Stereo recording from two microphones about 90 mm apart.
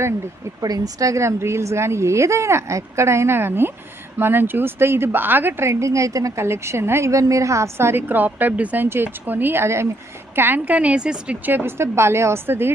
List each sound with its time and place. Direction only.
0.6 s a woman's voice: 40° right (ahead or behind); by 12.7 s 25° right (ahead or behind)